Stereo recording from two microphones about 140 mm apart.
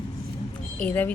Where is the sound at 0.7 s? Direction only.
10° left (ahead or behind).